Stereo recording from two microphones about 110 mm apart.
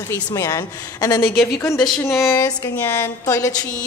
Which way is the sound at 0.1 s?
30° left (ahead or behind).